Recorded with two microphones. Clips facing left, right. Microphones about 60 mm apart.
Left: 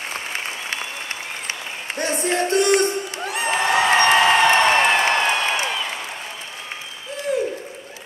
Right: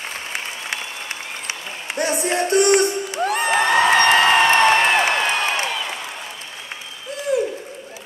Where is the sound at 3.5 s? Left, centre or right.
Right.